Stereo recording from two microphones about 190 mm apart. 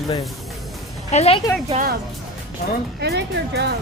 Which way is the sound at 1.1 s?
30° left (ahead or behind).